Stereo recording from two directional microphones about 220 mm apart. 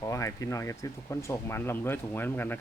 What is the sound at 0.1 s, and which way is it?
Speech, 15° left (ahead or behind).